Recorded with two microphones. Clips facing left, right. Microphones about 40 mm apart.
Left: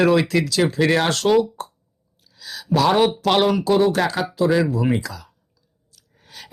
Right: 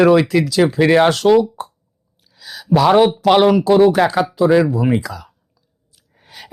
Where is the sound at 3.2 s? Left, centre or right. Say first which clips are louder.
Right 6 dB; centre.